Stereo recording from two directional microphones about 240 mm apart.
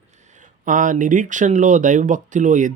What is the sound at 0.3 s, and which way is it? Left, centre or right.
Speech, right.